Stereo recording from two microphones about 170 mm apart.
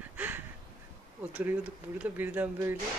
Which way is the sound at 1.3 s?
10° right (ahead or behind).